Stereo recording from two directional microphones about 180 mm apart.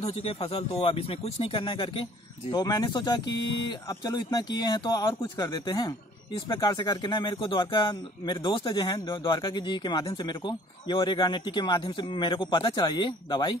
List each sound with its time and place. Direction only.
0.1 s speech: 35° left (ahead or behind)